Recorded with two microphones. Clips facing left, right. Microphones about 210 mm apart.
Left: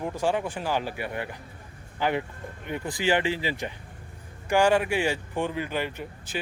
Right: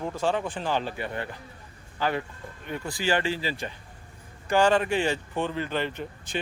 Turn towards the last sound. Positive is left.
turn(degrees=5)  # may be behind; listen again after turning